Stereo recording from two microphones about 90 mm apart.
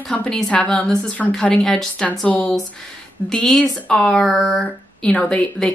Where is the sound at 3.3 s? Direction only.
5° left (ahead or behind).